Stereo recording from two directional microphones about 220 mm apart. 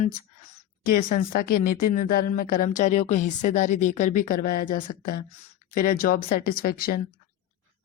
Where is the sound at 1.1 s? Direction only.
40° left (ahead or behind).